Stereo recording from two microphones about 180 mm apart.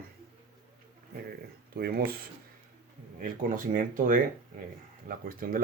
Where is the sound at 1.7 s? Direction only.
60° right (ahead or behind).